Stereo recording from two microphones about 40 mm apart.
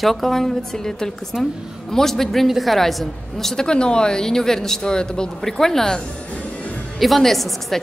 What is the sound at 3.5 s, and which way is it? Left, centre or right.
A man's voice, left.